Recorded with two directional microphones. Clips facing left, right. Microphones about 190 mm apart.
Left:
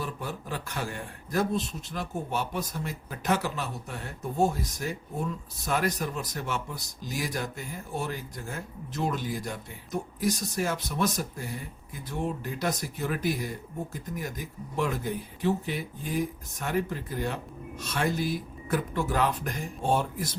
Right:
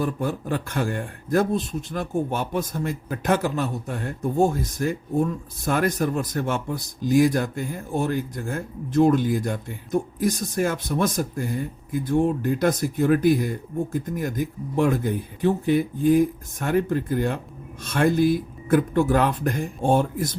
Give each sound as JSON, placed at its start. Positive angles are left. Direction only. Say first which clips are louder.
{"t": 0.0, "sound": "speech", "louder": "right 10 dB", "side_deg": -50}